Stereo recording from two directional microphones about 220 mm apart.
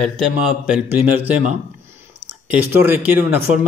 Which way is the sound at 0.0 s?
5° right (ahead or behind).